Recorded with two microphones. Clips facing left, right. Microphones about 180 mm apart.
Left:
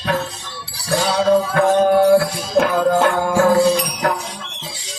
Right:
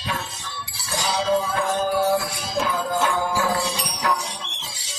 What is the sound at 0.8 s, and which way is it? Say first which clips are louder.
Music: left 7 dB; 60° left (ahead or behind).